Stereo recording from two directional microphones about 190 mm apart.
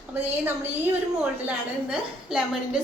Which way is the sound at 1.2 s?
5° right (ahead or behind).